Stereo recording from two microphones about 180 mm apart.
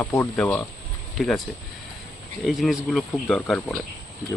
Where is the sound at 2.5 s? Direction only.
Centre (ahead or behind).